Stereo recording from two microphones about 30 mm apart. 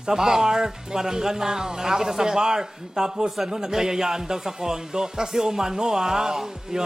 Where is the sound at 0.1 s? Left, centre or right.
Centre.